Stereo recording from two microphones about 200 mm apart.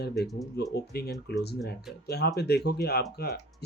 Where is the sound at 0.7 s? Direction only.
55° left (ahead or behind).